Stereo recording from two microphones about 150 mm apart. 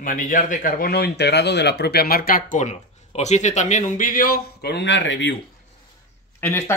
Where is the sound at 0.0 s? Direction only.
60° left (ahead or behind); by 4.7 s 85° left.